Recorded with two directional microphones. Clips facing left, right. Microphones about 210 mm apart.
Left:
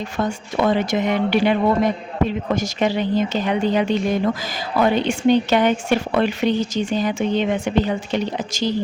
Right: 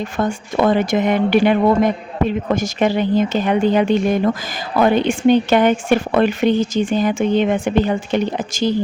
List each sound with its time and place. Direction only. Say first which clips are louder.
0.0 s speech: right 3 dB; 50° right (ahead or behind)